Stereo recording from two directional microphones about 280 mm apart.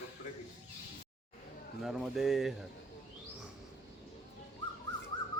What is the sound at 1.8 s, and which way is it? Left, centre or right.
Speech, centre.